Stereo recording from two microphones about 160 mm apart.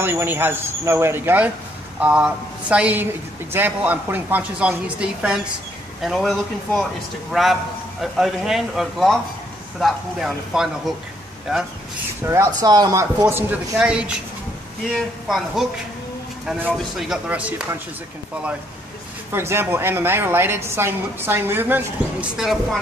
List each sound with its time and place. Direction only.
0.0 s a woman's voice: 15° right (ahead or behind)
8.0 s a man's voice: centre (ahead or behind)
12.2 s speech: 20° right (ahead or behind)
13.2 s a woman's voice: 10° right (ahead or behind)
19.3 s a woman's voice: 15° right (ahead or behind)
22.4 s a man's voice: centre (ahead or behind)